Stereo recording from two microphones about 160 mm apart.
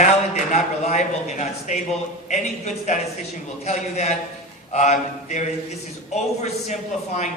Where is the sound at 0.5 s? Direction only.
45° left (ahead or behind).